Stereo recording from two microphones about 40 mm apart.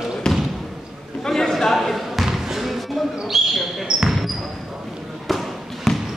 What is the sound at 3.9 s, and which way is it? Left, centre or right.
Basketball bounce, right.